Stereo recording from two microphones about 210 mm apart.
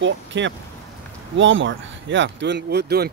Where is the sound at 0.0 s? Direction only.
60° right (ahead or behind).